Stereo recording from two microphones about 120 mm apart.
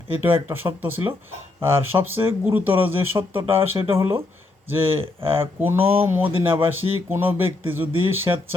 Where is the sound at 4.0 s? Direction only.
20° right (ahead or behind).